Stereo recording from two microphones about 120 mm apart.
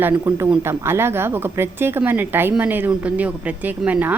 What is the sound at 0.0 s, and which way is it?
Speech, 20° right (ahead or behind).